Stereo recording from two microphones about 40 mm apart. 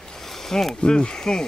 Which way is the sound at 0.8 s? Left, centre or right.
Left.